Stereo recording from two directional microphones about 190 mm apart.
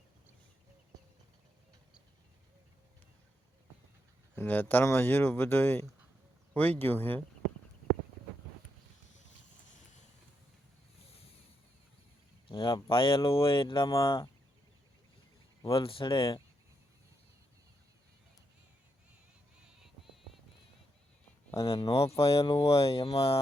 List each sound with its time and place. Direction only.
4.4 s speech: 10° left (ahead or behind)
12.5 s speech: 25° left (ahead or behind)
15.6 s speech: 30° left (ahead or behind)
21.7 s speech: 30° left (ahead or behind)